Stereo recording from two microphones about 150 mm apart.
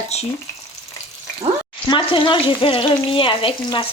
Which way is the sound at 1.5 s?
35° right (ahead or behind).